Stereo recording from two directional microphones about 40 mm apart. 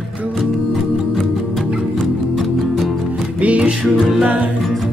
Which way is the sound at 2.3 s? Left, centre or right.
Centre.